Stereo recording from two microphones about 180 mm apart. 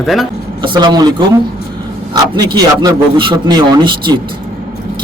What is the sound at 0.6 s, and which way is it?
Speech, 25° right (ahead or behind).